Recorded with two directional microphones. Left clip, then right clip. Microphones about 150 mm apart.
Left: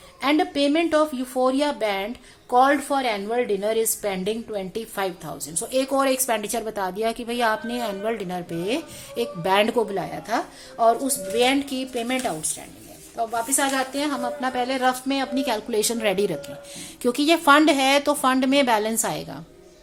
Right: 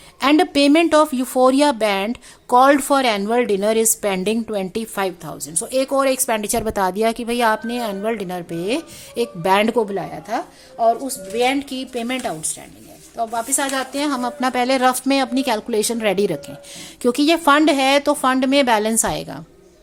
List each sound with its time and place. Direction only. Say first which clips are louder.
0.2 s a woman's voice: right 6 dB; 55° right (ahead or behind); by 9.8 s 35° right (ahead or behind)
9.9 s speech: right 2 dB; 20° right (ahead or behind)
10.8 s speech: right 2 dB; 5° right (ahead or behind)
11.3 s a woman's voice: right 2 dB; 25° right (ahead or behind)